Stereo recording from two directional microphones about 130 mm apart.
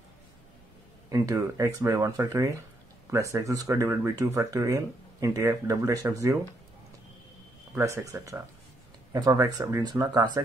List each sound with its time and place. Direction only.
1.1 s speech: 25° right (ahead or behind)
7.7 s speech: 20° right (ahead or behind)
9.9 s speech: 30° right (ahead or behind)